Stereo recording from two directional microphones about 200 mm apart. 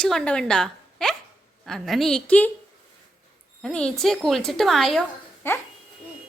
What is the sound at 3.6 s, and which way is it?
A woman's voice, 5° left (ahead or behind).